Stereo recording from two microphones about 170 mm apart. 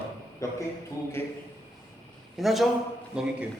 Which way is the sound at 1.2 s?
15° left (ahead or behind).